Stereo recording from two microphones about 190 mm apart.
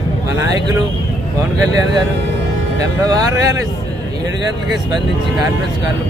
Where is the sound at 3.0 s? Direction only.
20° right (ahead or behind).